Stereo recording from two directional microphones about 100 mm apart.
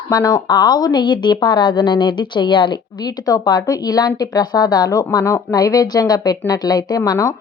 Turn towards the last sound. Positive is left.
turn(degrees=35)  # may be behind; listen again after turning